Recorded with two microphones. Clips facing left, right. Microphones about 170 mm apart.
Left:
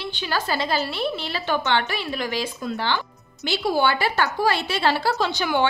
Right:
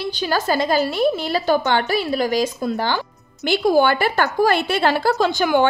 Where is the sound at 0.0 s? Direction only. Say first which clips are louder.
Right 5 dB; 40° right (ahead or behind).